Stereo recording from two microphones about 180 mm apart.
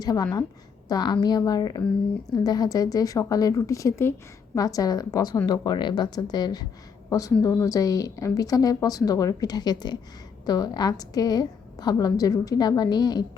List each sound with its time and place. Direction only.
0.0 s a woman's voice: 20° left (ahead or behind)